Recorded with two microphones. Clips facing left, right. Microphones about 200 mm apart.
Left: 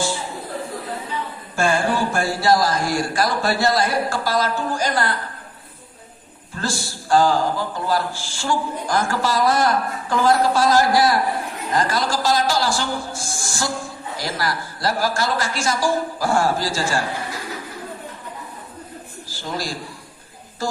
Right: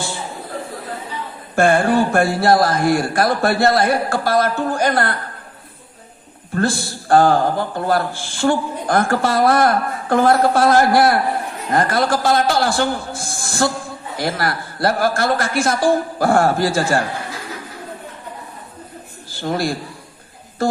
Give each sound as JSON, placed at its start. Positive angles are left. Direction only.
{"t": 1.5, "sound": "a man's voice", "side_deg": -55}
{"t": 6.5, "sound": "a man's voice", "side_deg": -55}
{"t": 19.3, "sound": "a man's voice", "side_deg": -60}